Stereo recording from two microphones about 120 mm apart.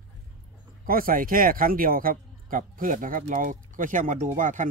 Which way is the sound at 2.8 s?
90° right.